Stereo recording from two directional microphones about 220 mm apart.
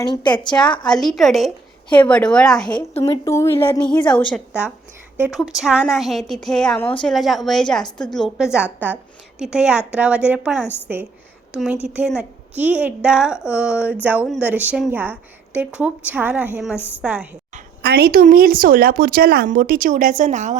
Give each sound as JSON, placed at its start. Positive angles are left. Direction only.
{"t": 0.0, "sound": "a woman's voice", "side_deg": 20}
{"t": 0.9, "sound": "a woman's voice", "side_deg": 0}
{"t": 2.6, "sound": "a woman's voice", "side_deg": 20}
{"t": 16.7, "sound": "a woman's voice", "side_deg": 10}
{"t": 17.0, "sound": "a woman's voice", "side_deg": -5}
{"t": 17.8, "sound": "speech", "side_deg": -45}